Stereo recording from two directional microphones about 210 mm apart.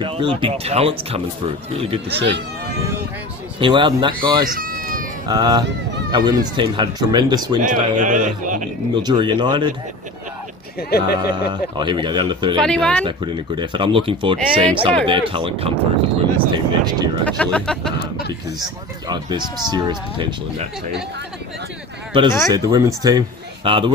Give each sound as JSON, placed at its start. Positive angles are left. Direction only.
{"t": 0.0, "sound": "speech", "side_deg": -25}
{"t": 3.5, "sound": "speech", "side_deg": -25}
{"t": 4.5, "sound": "cat", "side_deg": -45}
{"t": 5.3, "sound": "speech", "side_deg": -20}
{"t": 7.6, "sound": "a man's voice", "side_deg": -35}
{"t": 8.9, "sound": "speech", "side_deg": -20}
{"t": 10.8, "sound": "speech", "side_deg": 45}
{"t": 11.2, "sound": "speech", "side_deg": -20}
{"t": 12.5, "sound": "speech", "side_deg": 5}
{"t": 13.6, "sound": "speech", "side_deg": -25}
{"t": 17.3, "sound": "speech", "side_deg": 5}
{"t": 18.6, "sound": "speech", "side_deg": -20}
{"t": 22.1, "sound": "speech", "side_deg": -25}